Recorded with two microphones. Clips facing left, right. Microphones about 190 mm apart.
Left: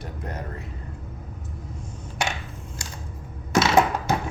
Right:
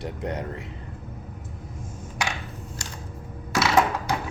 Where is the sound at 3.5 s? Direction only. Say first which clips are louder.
Left 2 dB; 25° left (ahead or behind).